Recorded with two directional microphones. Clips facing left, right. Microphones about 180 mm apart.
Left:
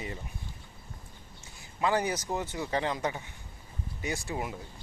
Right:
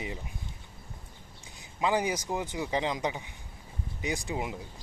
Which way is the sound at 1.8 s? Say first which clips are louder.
Even; 15° right (ahead or behind).